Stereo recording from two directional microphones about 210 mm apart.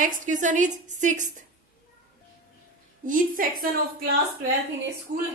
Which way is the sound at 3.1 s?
40° right (ahead or behind).